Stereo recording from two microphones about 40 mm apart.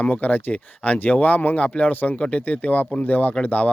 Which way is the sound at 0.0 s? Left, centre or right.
Left.